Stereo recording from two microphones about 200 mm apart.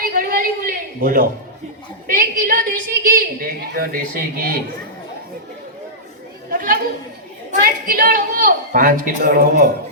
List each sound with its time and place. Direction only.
0.0 s a sound: 45° right (ahead or behind)
2.0 s a woman's voice: 45° right (ahead or behind)
6.5 s chatter: 45° right (ahead or behind)
7.5 s a woman's voice: 45° right (ahead or behind)